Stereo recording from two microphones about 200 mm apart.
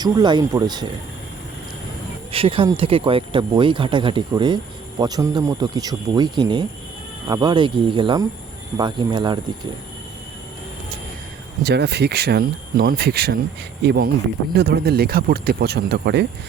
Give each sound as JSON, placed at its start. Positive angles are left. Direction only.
{"t": 0.0, "sound": "speech", "side_deg": -20}
{"t": 2.3, "sound": "speech", "side_deg": -25}
{"t": 11.6, "sound": "speech", "side_deg": -55}